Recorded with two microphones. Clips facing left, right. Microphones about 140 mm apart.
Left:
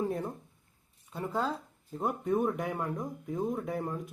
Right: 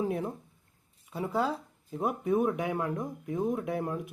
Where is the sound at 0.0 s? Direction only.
5° right (ahead or behind).